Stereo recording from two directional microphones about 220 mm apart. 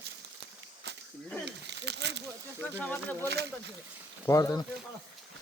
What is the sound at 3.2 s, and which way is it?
Speech, 50° right (ahead or behind).